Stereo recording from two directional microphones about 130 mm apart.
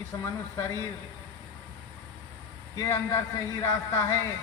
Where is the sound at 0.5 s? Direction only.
20° left (ahead or behind).